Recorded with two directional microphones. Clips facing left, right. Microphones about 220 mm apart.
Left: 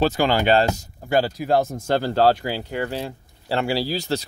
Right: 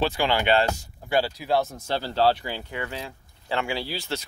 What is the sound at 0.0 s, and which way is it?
Speech, 40° left (ahead or behind).